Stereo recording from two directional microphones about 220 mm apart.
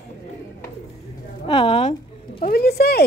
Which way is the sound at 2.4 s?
45° left (ahead or behind).